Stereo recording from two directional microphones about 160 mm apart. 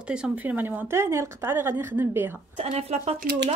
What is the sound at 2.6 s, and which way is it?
Speech, 40° right (ahead or behind).